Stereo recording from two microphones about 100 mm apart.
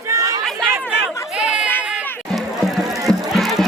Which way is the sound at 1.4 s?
10° right (ahead or behind).